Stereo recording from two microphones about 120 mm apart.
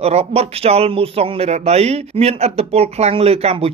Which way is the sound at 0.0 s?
60° right (ahead or behind).